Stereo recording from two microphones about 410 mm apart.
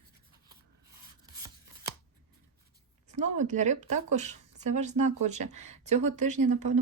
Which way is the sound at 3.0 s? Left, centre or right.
Centre.